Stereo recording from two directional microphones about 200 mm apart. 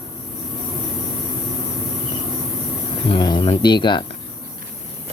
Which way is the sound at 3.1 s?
20° left (ahead or behind).